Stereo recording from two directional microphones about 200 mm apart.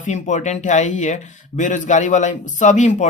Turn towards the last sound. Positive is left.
turn(degrees=35)  # may be behind; listen again after turning